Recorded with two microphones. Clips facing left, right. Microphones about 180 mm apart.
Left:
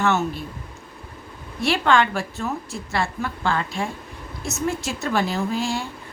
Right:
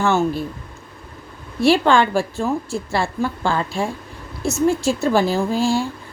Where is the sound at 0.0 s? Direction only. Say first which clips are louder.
Right 4 dB; 30° right (ahead or behind).